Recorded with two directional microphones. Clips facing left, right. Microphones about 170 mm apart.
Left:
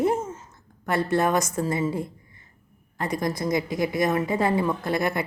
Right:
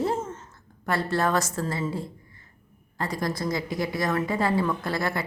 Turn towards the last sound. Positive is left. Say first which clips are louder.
# left 3 dB
turn(degrees=20)  # may be behind; listen again after turning